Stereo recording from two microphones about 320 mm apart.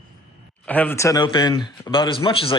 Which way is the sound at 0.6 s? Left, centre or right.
Centre.